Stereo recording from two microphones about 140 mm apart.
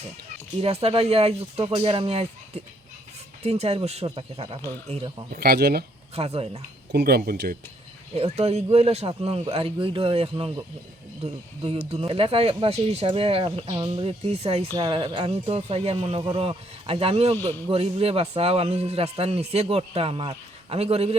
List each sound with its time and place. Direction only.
0.6 s speech: 45° right (ahead or behind)
5.3 s speech: 90° right
6.1 s speech: 45° right (ahead or behind)
7.0 s speech: 90° right
8.1 s speech: 45° right (ahead or behind)
11.9 s speech: 45° right (ahead or behind)
14.8 s speech: 30° right (ahead or behind)